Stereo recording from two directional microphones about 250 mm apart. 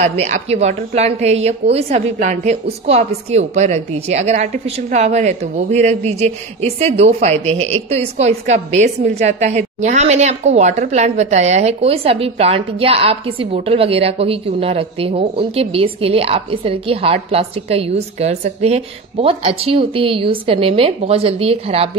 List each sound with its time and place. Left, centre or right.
0.0 s a woman's voice: right